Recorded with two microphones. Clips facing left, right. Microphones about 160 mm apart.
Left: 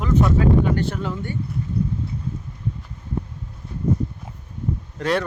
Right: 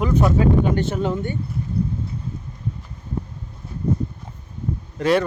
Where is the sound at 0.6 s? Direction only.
20° right (ahead or behind).